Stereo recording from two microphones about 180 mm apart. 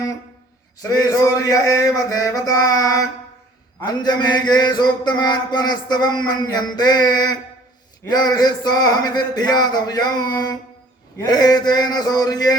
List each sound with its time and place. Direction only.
0.8 s mantra: 20° left (ahead or behind)